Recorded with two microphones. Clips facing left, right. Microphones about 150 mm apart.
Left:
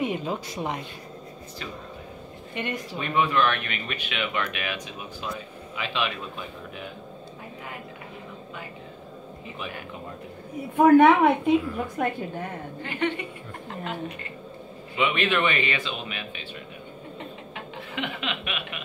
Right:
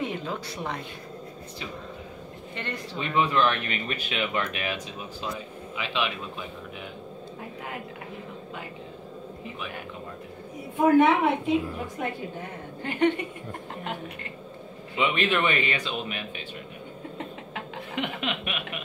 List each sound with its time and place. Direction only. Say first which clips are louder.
0.0 s speech: left 3 dB; 15° left (ahead or behind)
2.5 s a man's voice: left 4 dB; 15° left (ahead or behind)
3.0 s speech: even; 25° right (ahead or behind)
5.8 s speech: even; 20° right (ahead or behind)
10.8 s a woman's voice: left 4 dB; 55° left (ahead or behind)
12.8 s a sound: right 4 dB; 45° right (ahead or behind)
15.0 s speech: left 1 dB; 35° right (ahead or behind)
17.9 s a sound: right 1 dB; 45° right (ahead or behind)